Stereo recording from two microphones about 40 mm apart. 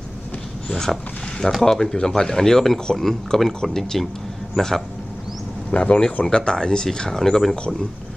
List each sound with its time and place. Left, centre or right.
0.7 s speech: centre
5.7 s speech: left; by 7.5 s centre